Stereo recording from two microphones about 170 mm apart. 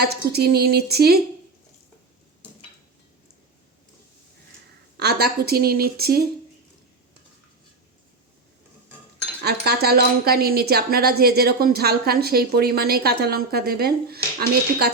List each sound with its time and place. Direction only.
0.0 s a woman's voice: 70° right (ahead or behind)
4.9 s a woman's voice: 70° right (ahead or behind)
9.4 s a woman's voice: 70° right (ahead or behind)